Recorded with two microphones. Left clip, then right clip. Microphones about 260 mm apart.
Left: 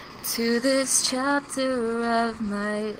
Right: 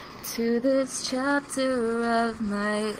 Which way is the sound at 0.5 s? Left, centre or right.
Left.